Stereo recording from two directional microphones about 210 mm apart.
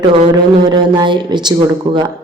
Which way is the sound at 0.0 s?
25° right (ahead or behind).